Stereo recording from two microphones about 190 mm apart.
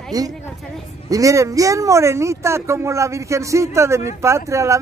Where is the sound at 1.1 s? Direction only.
15° right (ahead or behind).